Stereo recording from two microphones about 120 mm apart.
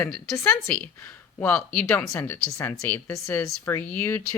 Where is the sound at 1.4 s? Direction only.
15° left (ahead or behind).